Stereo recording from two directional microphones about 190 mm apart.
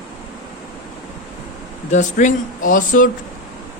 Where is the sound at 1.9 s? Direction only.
40° left (ahead or behind).